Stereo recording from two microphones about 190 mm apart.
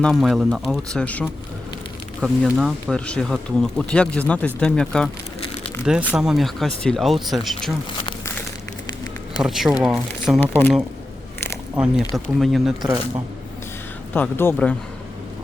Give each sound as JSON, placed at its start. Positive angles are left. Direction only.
{"t": 0.0, "sound": "speech", "side_deg": 0}
{"t": 2.2, "sound": "speech", "side_deg": 0}
{"t": 9.4, "sound": "speech", "side_deg": 0}
{"t": 11.8, "sound": "speech", "side_deg": 0}
{"t": 14.1, "sound": "speech", "side_deg": 10}